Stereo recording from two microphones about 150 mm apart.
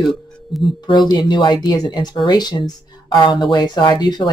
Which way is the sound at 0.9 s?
30° left (ahead or behind).